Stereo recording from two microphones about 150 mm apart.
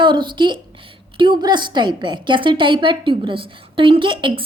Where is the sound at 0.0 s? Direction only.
30° right (ahead or behind).